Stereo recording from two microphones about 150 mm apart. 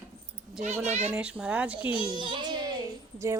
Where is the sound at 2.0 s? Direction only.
30° right (ahead or behind).